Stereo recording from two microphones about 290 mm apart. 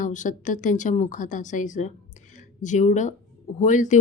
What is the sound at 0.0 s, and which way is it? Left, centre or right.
A woman's voice, left.